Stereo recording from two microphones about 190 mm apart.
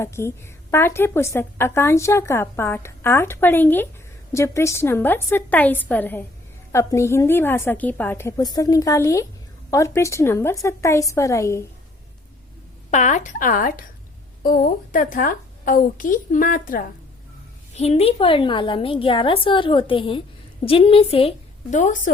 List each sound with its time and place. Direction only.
0.0 s a woman's voice: 15° left (ahead or behind)
12.9 s a woman's voice: 40° left (ahead or behind)
17.7 s a woman's voice: 35° left (ahead or behind)